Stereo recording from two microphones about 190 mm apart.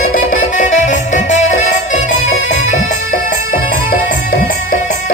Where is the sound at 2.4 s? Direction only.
90° left.